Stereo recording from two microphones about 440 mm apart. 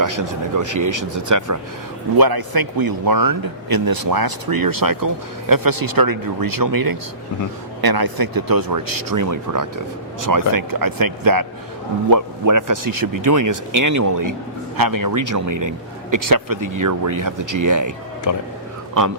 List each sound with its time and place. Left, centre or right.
0.0 s speech: right
2.1 s speech: right
18.3 s speech: left